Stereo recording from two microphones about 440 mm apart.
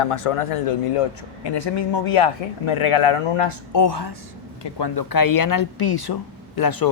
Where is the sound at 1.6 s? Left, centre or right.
Left.